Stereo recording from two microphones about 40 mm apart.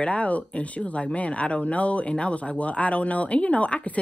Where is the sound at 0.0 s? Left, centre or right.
Left.